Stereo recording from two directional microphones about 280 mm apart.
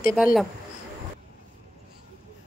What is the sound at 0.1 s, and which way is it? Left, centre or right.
Speech, centre.